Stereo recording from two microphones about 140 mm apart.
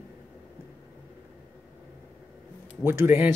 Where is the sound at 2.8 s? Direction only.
15° right (ahead or behind).